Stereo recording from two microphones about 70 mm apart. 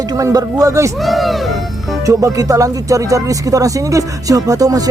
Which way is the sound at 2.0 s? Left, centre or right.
Right.